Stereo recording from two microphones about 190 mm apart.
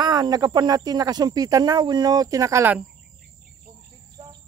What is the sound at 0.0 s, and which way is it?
Speech, 20° right (ahead or behind).